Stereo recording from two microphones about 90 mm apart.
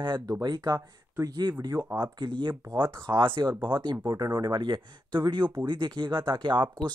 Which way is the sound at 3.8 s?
50° right (ahead or behind).